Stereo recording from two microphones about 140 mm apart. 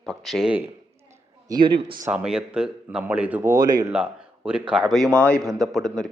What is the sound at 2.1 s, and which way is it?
Speech, 5° right (ahead or behind).